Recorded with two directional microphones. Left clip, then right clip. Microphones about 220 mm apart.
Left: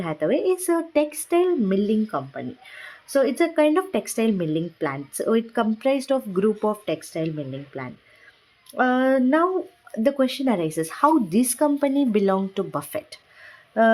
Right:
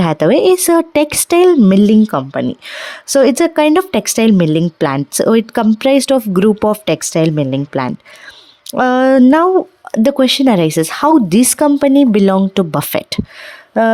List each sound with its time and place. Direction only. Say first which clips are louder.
0.0 s speech: right 12 dB; 50° right (ahead or behind)